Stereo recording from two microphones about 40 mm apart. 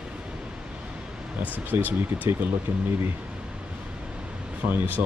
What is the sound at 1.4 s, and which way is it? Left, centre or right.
Speech, right.